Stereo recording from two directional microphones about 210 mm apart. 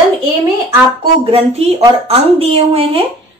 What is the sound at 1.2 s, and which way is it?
A woman's voice, 30° right (ahead or behind).